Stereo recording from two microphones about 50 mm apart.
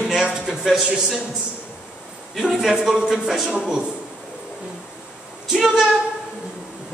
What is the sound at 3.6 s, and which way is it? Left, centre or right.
Speech, centre.